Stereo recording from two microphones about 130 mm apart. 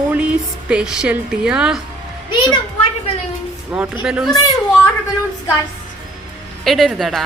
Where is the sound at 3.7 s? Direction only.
10° right (ahead or behind).